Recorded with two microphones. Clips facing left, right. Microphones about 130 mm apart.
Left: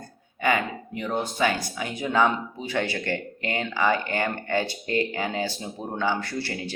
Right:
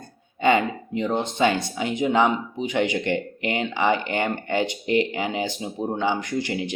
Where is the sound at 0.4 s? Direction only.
25° right (ahead or behind).